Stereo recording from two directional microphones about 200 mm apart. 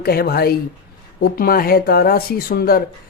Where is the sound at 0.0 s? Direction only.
50° left (ahead or behind).